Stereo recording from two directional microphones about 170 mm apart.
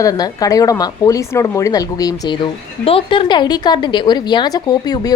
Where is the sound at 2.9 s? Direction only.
30° left (ahead or behind).